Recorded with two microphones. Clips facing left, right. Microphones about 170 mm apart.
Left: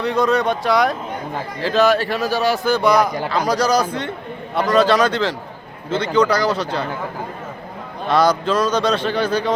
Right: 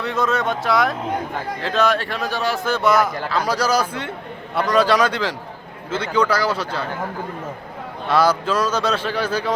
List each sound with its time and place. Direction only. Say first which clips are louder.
0.0 s a man's voice: left 4 dB; centre (ahead or behind)
3.1 s a man's voice: left 2 dB; 15° left (ahead or behind)
3.4 s speech: left 3 dB; 5° right (ahead or behind)
8.0 s speech: left 2 dB; 5° right (ahead or behind)